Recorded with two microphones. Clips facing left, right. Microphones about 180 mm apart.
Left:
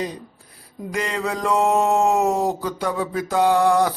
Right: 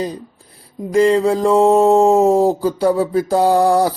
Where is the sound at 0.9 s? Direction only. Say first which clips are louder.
Right 12 dB; 30° right (ahead or behind).